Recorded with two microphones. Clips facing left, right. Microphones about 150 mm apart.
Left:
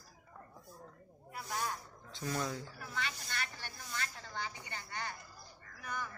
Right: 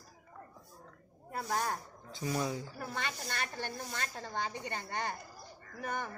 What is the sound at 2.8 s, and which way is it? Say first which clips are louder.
Speech: right 4 dB; 50° right (ahead or behind).